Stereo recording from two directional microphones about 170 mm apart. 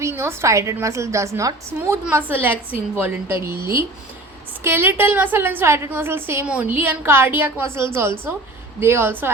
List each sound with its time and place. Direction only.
0.0 s a woman's voice: 15° right (ahead or behind)